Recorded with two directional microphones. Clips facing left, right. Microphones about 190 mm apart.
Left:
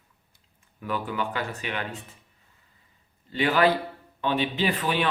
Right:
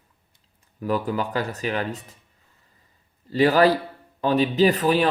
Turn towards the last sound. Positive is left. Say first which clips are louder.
# right 7 dB
turn(degrees=-40)  # may be behind; listen again after turning